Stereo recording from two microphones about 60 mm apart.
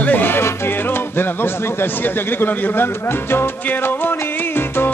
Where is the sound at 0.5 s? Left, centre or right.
Left.